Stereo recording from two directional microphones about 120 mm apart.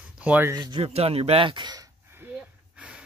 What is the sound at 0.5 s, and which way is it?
Speech, 35° right (ahead or behind).